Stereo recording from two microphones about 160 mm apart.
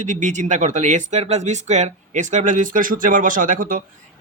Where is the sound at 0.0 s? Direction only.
50° right (ahead or behind).